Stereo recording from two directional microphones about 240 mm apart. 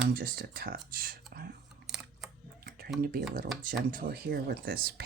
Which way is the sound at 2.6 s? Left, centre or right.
Right.